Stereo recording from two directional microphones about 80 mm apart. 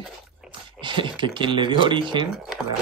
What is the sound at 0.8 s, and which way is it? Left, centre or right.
Speech, right.